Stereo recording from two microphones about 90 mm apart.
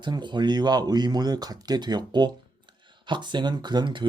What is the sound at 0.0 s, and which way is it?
Speech, 60° right (ahead or behind).